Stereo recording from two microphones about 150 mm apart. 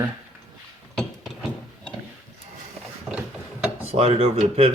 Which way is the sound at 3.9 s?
40° right (ahead or behind).